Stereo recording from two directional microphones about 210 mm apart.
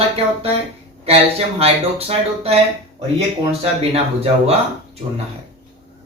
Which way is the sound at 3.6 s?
30° right (ahead or behind).